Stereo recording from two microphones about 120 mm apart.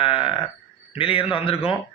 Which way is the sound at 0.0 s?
45° left (ahead or behind).